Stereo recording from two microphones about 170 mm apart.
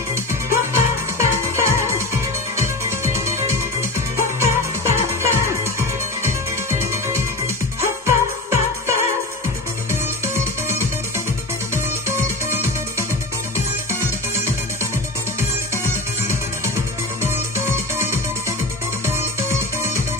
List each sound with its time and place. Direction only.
0.1 s music: 15° right (ahead or behind)
4.4 s music: 15° right (ahead or behind)
10.2 s music: 15° right (ahead or behind)
15.8 s music: 15° right (ahead or behind)